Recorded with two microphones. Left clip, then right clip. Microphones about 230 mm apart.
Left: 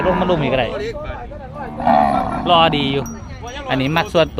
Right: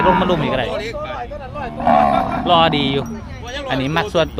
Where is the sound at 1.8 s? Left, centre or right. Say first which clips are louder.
Right 1 dB; centre.